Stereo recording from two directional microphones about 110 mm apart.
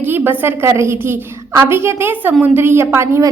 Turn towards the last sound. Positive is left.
turn(degrees=-25)  # may be behind; listen again after turning